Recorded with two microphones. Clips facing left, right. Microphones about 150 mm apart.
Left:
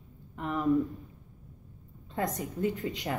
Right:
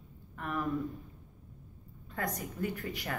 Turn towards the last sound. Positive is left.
turn(degrees=20)  # may be behind; listen again after turning